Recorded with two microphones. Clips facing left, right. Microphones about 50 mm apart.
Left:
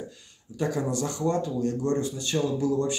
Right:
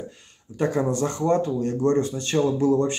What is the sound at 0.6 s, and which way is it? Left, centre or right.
Speech, right.